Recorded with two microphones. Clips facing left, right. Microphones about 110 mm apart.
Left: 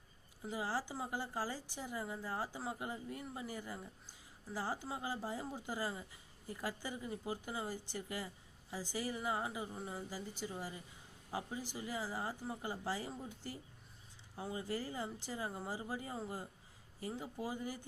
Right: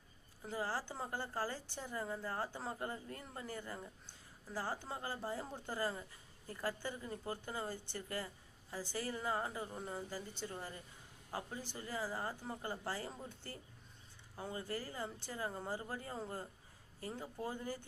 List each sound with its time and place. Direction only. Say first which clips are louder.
0.5 s a woman's voice: left 1 dB; 15° left (ahead or behind)